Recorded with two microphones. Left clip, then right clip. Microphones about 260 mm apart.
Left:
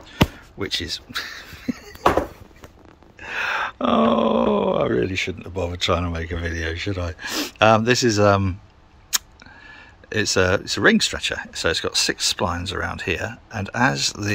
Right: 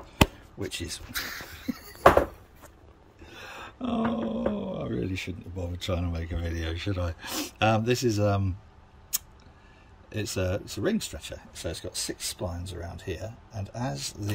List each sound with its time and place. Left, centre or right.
0.7 s speech: centre
3.3 s groan: centre
9.7 s speech: centre